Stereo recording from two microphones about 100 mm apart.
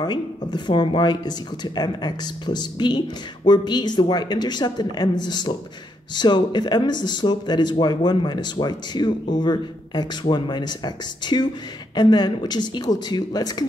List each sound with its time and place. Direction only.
0.0 s speech: 45° left (ahead or behind)